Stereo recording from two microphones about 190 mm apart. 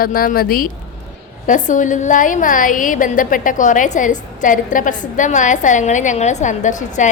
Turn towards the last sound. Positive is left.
turn(degrees=40)  # may be behind; listen again after turning